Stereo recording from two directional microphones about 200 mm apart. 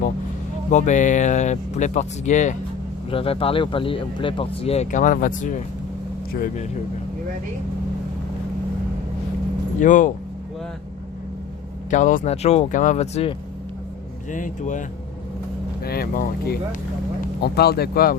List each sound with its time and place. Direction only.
0.7 s speech: 35° left (ahead or behind)
9.8 s speech: 40° left (ahead or behind)
11.9 s speech: 40° left (ahead or behind)
15.8 s speech: 50° left (ahead or behind)